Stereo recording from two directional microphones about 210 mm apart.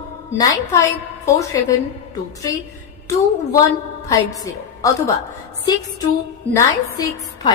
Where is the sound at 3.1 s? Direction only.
15° left (ahead or behind).